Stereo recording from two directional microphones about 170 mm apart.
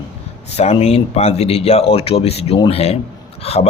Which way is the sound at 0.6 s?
40° left (ahead or behind).